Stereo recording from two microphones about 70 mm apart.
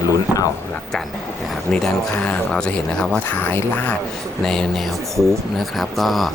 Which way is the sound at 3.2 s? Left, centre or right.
Left.